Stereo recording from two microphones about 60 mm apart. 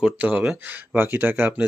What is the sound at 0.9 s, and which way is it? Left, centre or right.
Speech, right.